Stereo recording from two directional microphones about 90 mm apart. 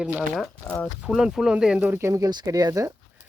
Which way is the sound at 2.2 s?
50° right (ahead or behind).